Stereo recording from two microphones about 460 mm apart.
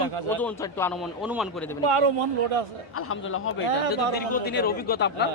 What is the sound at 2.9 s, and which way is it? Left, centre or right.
Speech, left.